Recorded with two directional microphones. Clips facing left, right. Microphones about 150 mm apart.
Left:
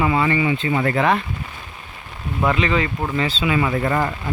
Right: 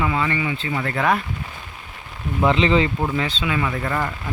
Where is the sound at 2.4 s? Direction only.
25° right (ahead or behind).